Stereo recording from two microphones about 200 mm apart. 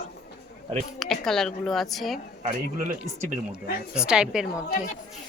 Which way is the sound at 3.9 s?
5° right (ahead or behind).